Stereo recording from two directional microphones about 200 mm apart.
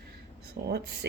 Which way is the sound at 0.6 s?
55° right (ahead or behind).